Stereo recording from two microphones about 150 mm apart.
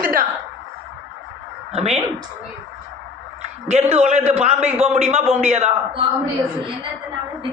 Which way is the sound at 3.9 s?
45° right (ahead or behind).